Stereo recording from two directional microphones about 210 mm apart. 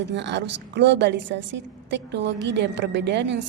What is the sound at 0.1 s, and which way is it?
A woman's voice, 55° right (ahead or behind).